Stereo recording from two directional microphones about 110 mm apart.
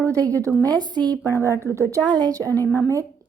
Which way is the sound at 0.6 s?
40° right (ahead or behind).